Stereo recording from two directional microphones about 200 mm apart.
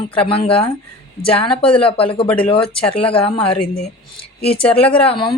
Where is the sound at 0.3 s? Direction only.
30° left (ahead or behind).